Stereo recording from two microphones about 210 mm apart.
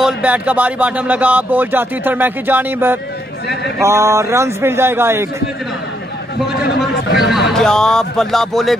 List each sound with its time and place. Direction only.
0.0 s speech: 5° right (ahead or behind)
6.8 s speech: centre (ahead or behind)